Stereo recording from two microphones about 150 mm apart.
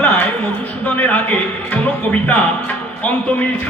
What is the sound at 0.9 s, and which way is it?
Speech, 10° left (ahead or behind).